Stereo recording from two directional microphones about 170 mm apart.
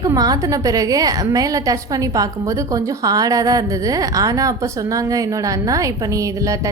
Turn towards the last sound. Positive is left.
turn(degrees=-20)  # may be behind; listen again after turning